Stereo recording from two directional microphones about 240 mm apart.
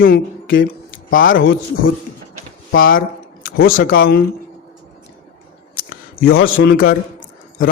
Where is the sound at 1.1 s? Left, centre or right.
Left.